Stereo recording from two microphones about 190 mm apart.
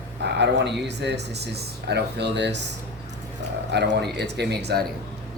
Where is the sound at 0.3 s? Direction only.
65° right (ahead or behind).